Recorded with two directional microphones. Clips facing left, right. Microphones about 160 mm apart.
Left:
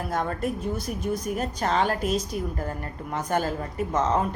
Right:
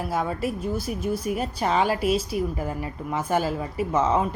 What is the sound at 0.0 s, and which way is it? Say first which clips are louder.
A woman's voice: right 1 dB; 5° right (ahead or behind).